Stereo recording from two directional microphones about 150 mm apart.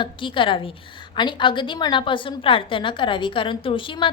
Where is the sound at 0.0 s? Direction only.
35° left (ahead or behind).